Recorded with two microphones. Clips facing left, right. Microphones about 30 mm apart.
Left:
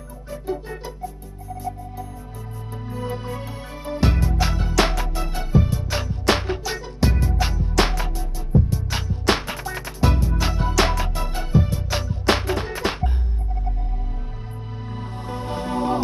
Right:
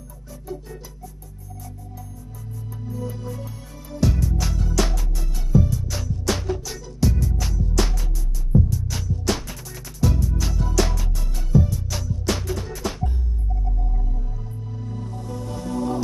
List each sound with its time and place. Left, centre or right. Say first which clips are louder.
0.3 s music: left 7 dB; left
2.9 s music: left 3 dB; left
14.9 s music: left 2 dB; left